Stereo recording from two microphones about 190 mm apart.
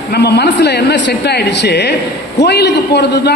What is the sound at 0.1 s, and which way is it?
A man's voice, 60° left (ahead or behind).